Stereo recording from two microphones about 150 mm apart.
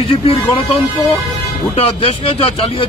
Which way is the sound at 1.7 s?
40° left (ahead or behind).